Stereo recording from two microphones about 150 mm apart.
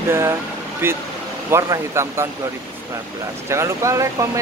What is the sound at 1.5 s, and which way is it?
Speech, 20° right (ahead or behind).